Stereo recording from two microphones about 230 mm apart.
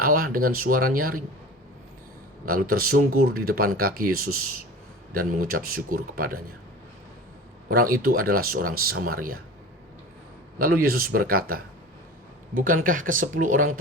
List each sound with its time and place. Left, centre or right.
0.0 s speech: right
2.5 s speech: right
7.7 s speech: right
10.6 s speech: right